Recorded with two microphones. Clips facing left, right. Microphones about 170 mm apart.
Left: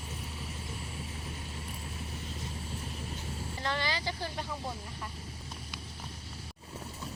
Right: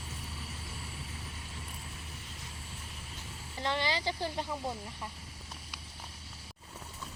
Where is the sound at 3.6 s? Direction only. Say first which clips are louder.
Right 2 dB; 25° right (ahead or behind).